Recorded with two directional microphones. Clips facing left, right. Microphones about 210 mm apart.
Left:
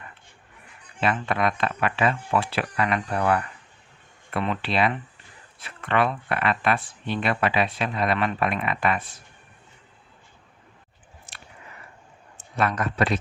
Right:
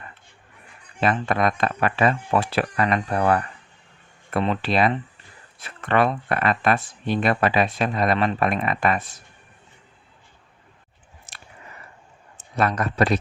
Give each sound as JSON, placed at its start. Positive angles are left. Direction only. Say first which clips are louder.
{"t": 1.0, "sound": "speech", "louder": "right 3 dB", "side_deg": -40}
{"t": 11.3, "sound": "biting", "louder": "right 1 dB", "side_deg": -40}
{"t": 12.5, "sound": "speech", "louder": "right 3 dB", "side_deg": -40}